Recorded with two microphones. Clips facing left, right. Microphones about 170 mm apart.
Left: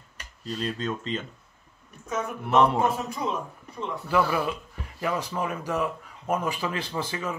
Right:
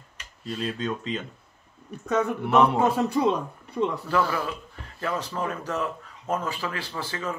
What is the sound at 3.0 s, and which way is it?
Speech, 70° right (ahead or behind).